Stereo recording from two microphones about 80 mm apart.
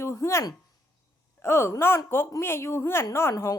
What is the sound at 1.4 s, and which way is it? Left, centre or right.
Speech, left.